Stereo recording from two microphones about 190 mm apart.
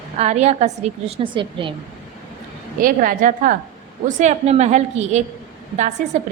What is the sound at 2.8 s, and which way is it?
A woman's voice, 45° right (ahead or behind).